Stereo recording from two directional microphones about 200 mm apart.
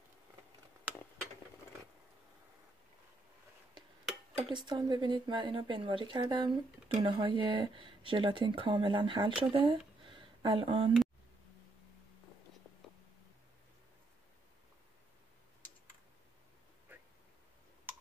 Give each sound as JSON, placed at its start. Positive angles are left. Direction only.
{"t": 4.4, "sound": "a woman's voice", "side_deg": -25}